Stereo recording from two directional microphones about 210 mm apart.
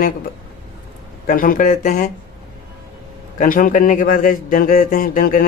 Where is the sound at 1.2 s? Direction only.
40° left (ahead or behind).